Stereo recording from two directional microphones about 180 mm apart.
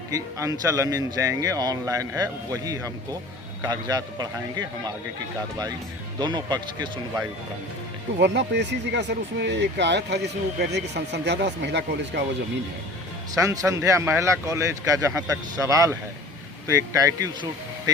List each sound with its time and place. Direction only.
0.1 s a man's voice: 20° right (ahead or behind)
6.1 s a man's voice: 25° right (ahead or behind)
8.2 s speech: 75° right (ahead or behind)
13.3 s a man's voice: 20° right (ahead or behind)